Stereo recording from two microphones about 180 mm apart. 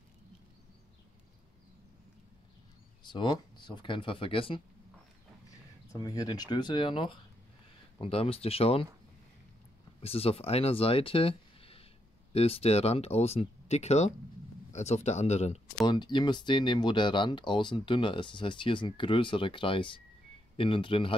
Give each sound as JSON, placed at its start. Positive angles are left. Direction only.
{"t": 3.0, "sound": "speech", "side_deg": 25}
{"t": 5.9, "sound": "speech", "side_deg": 20}
{"t": 10.0, "sound": "speech", "side_deg": 35}
{"t": 15.9, "sound": "speech", "side_deg": 25}